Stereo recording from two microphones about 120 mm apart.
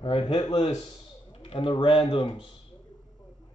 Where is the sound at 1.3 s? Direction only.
50° left (ahead or behind).